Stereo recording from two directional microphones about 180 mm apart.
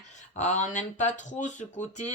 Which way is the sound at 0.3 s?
40° left (ahead or behind).